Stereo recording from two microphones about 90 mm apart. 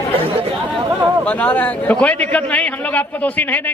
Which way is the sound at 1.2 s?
15° left (ahead or behind).